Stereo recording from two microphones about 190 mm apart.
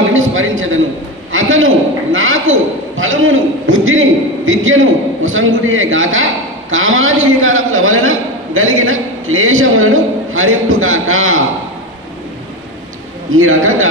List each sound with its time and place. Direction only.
0.1 s a sound: 90° right
1.3 s a man's voice: 90° right
13.3 s a man's voice: 90° right